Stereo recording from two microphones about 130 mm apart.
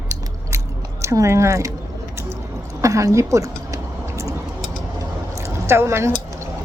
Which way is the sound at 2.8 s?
25° right (ahead or behind).